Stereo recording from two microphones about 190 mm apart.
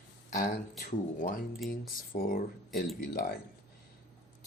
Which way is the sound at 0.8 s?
45° left (ahead or behind).